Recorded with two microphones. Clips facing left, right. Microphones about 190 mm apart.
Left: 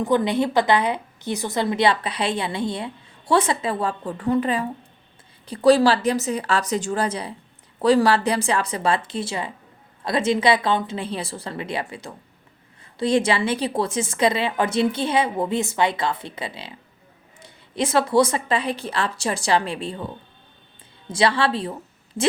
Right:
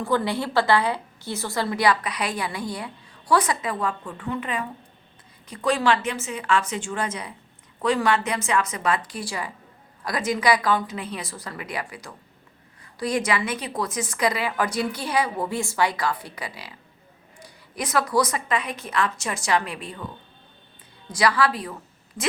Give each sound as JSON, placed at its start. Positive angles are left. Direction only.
{"t": 0.0, "sound": "a woman's voice", "side_deg": 20}
{"t": 21.1, "sound": "a woman's voice", "side_deg": 25}